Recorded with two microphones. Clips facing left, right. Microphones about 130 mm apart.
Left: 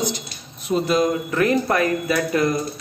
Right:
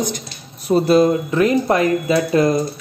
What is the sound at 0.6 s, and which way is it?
Speech, 35° right (ahead or behind).